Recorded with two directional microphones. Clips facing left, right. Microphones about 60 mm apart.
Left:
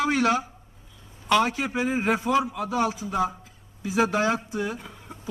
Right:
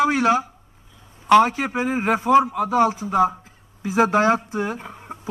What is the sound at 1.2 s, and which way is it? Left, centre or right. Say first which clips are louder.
Speech: right 7 dB; right.